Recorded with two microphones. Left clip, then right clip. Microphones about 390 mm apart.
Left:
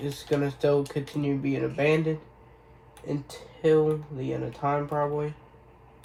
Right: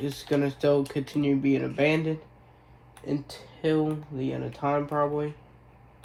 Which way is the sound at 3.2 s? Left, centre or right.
Centre.